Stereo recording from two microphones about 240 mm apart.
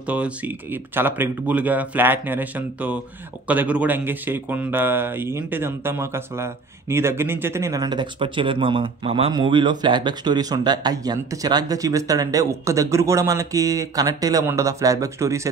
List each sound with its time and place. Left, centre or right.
0.0 s speech: centre